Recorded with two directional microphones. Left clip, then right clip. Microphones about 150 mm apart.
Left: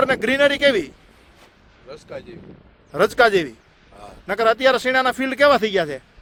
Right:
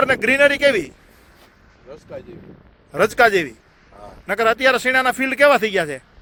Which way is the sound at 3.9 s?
20° left (ahead or behind).